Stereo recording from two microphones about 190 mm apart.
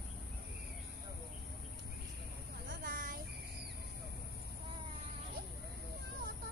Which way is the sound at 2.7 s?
45° right (ahead or behind).